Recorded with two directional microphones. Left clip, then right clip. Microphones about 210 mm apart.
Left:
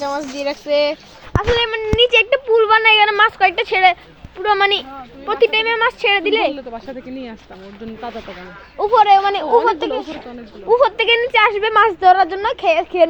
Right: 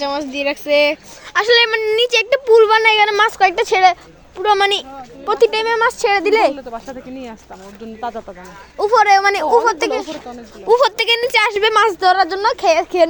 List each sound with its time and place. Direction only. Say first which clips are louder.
0.0 s a woman's voice: right 2 dB; 25° right (ahead or behind)
1.4 s a woman's voice: right 5 dB; 55° right (ahead or behind)
5.2 s a woman's voice: right 1 dB; 30° right (ahead or behind)
6.6 s speech: right 1 dB; 5° left (ahead or behind)
8.8 s a woman's voice: even; 35° right (ahead or behind)
11.9 s a woman's voice: left 2 dB; 25° right (ahead or behind)